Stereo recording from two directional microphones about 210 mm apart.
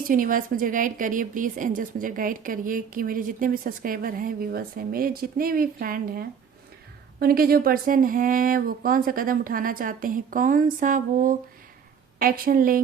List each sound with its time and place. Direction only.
0.0 s speech: 40° right (ahead or behind)